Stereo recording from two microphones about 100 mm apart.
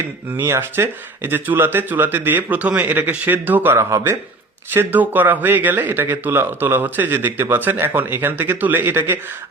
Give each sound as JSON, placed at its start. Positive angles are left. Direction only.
{"t": 0.3, "sound": "speech", "side_deg": -25}